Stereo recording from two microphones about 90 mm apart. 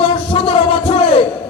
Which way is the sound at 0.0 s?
90° left.